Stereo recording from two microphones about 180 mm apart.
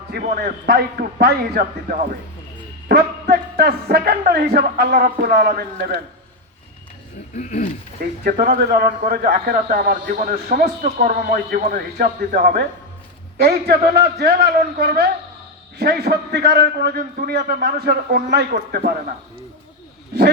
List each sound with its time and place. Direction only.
0.1 s speech: 50° right (ahead or behind)
7.3 s speech: 40° left (ahead or behind)
8.2 s a man's voice: 50° right (ahead or behind)